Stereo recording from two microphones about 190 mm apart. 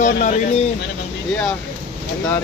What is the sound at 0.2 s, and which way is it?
Speech, 40° left (ahead or behind).